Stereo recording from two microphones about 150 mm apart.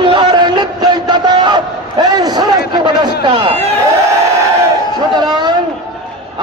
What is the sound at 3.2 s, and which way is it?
Speech, 35° right (ahead or behind).